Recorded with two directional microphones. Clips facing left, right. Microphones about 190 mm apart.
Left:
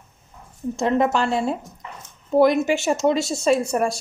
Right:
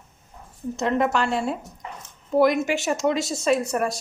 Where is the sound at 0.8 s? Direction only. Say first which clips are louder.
Left 2 dB; 30° left (ahead or behind).